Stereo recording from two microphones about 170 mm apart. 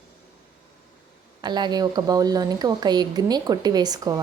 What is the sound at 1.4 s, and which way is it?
Speech, 25° right (ahead or behind).